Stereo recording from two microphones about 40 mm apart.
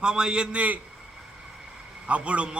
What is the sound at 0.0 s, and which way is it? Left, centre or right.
Speech, right.